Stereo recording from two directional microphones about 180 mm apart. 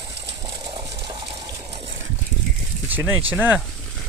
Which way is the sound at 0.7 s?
30° right (ahead or behind).